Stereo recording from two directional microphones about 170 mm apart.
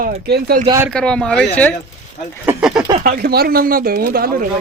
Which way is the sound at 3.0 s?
65° right (ahead or behind).